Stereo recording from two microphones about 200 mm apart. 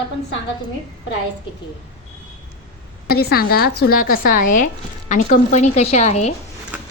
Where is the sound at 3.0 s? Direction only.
50° left (ahead or behind); by 6.4 s 35° left (ahead or behind).